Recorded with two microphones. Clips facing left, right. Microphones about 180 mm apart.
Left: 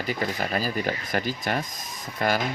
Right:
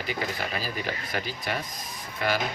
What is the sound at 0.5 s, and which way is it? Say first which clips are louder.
Speech: left 5 dB; 45° left (ahead or behind).